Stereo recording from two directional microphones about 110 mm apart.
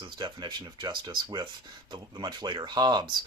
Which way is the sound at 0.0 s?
45° right (ahead or behind).